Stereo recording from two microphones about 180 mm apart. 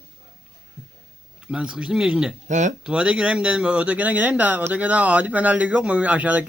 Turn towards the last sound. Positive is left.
turn(degrees=-5)  # may be behind; listen again after turning